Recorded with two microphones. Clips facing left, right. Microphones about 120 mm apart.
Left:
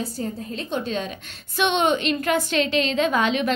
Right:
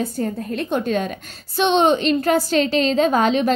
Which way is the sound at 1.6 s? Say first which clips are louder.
Right 4 dB; 35° right (ahead or behind).